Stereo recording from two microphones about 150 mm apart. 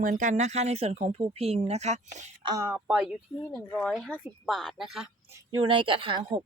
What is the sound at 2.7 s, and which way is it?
Speech, 10° right (ahead or behind).